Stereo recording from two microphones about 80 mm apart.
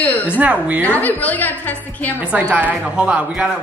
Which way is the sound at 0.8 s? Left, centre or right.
Centre.